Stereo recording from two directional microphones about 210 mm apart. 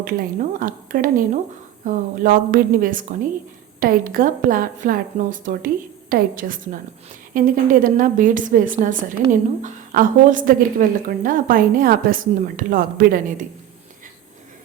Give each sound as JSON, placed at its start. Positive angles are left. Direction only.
{"t": 0.6, "sound": "a woman's voice", "side_deg": -40}